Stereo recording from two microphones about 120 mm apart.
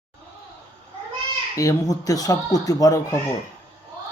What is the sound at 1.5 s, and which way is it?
A child's voice, 30° left (ahead or behind).